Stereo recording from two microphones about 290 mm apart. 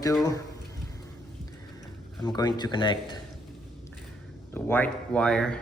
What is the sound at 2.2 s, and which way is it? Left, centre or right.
Speech, centre.